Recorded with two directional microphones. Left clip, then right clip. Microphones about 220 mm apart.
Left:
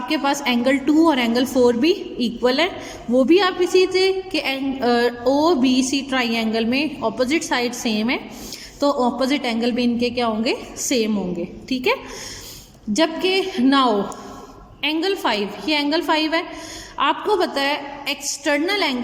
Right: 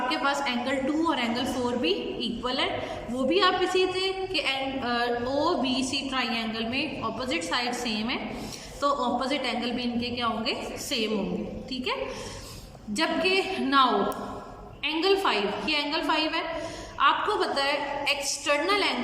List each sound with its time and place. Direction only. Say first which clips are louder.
0.1 s a woman's voice: left 6 dB; 35° left (ahead or behind)